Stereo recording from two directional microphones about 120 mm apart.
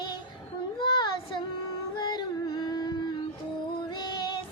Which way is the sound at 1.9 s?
35° left (ahead or behind).